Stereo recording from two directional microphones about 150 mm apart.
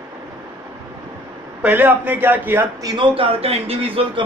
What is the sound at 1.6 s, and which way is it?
A man's voice, 10° right (ahead or behind).